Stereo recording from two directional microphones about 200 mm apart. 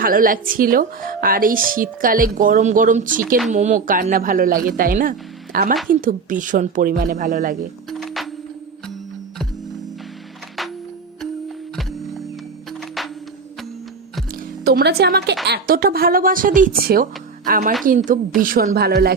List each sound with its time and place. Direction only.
0.0 s speech: 45° right (ahead or behind)
7.9 s music: centre (ahead or behind)
11.8 s music: centre (ahead or behind)
14.6 s speech: 50° right (ahead or behind)